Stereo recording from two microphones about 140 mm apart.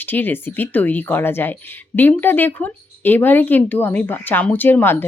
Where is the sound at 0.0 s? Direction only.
15° left (ahead or behind).